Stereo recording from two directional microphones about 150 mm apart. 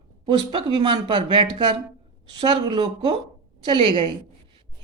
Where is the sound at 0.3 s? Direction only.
35° right (ahead or behind).